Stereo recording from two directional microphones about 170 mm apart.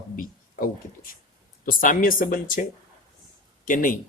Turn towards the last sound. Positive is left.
turn(degrees=50)  # may be behind; listen again after turning